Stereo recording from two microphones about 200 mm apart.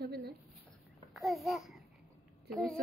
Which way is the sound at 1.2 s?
Centre (ahead or behind).